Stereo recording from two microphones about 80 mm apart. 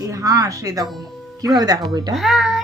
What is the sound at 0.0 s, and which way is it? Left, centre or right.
Speech, right.